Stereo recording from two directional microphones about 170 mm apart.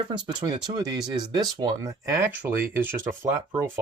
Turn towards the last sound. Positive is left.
turn(degrees=-15)  # may be behind; listen again after turning